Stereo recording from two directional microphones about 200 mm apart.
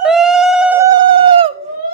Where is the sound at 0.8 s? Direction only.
25° right (ahead or behind).